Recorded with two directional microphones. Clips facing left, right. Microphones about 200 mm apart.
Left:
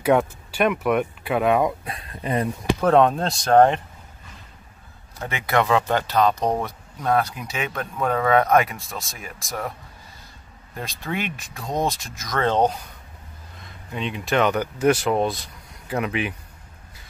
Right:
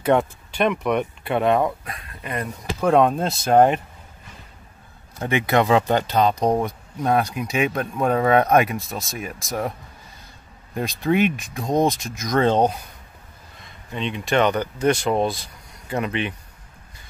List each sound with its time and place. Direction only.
0.0 s speech: 5° left (ahead or behind)
1.9 s speech: 30° left (ahead or behind)
2.8 s speech: 5° right (ahead or behind)
5.3 s speech: 20° right (ahead or behind)
10.8 s speech: 15° right (ahead or behind)
13.9 s speech: 5° left (ahead or behind)